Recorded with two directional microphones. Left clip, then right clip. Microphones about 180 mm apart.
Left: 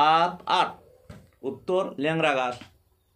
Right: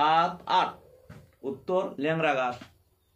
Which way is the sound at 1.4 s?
40° left (ahead or behind).